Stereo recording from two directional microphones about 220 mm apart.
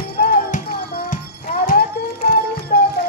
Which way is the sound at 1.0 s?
35° left (ahead or behind).